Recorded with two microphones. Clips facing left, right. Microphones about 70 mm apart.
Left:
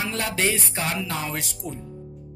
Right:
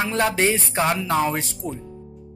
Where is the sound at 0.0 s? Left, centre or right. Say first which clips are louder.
Right 5 dB; right.